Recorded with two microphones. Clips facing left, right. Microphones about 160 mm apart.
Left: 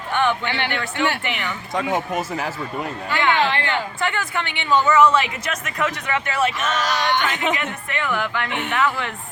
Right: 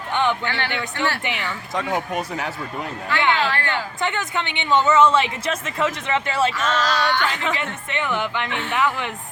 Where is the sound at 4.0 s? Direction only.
20° right (ahead or behind).